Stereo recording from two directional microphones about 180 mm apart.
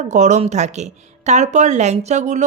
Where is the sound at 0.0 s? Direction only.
40° right (ahead or behind).